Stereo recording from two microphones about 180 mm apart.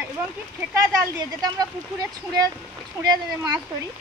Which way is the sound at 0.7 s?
20° right (ahead or behind).